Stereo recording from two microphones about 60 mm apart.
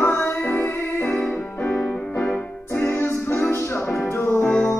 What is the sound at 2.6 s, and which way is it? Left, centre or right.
Music, left.